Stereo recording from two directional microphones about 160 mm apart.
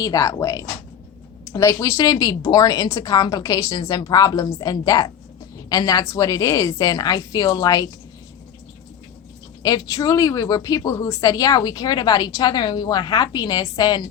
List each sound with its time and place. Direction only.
0.0 s speech: 20° left (ahead or behind)
9.6 s speech: 25° left (ahead or behind)